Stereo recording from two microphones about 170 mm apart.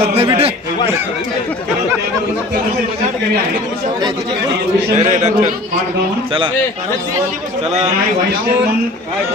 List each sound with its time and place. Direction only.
0.1 s a man's voice: 35° right (ahead or behind)
4.9 s a man's voice: 45° right (ahead or behind)